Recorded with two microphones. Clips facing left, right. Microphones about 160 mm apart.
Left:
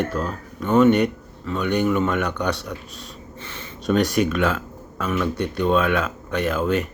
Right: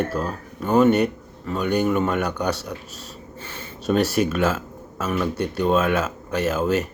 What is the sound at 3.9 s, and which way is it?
Speech, 35° right (ahead or behind).